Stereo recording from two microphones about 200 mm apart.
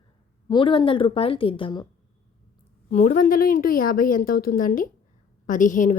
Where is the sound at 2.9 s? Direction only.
40° left (ahead or behind).